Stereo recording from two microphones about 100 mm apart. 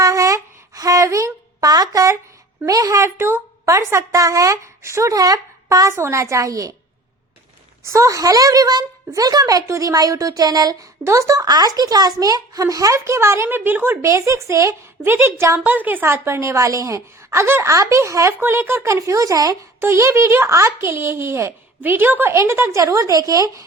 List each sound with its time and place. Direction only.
0.0 s a sound: 30° right (ahead or behind)
2.6 s a woman's voice: 35° right (ahead or behind)
7.9 s a woman's voice: 35° right (ahead or behind)
14.0 s a woman's voice: 30° right (ahead or behind)
15.6 s a woman's voice: 20° right (ahead or behind)
18.3 s a woman's voice: 20° right (ahead or behind)